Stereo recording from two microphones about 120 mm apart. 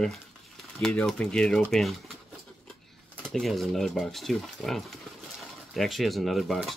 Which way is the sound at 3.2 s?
5° left (ahead or behind).